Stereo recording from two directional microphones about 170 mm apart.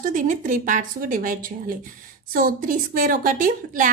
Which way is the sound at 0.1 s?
50° right (ahead or behind).